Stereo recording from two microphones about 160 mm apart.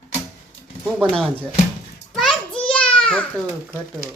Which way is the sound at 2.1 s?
Centre (ahead or behind).